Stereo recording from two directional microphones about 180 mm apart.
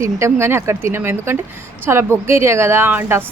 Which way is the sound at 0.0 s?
15° right (ahead or behind).